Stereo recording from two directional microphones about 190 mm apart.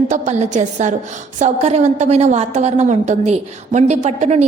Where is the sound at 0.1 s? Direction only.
40° right (ahead or behind).